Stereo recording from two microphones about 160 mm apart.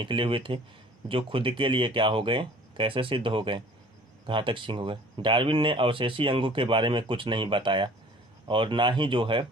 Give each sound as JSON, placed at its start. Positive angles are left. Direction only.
{"t": 0.0, "sound": "speech", "side_deg": -30}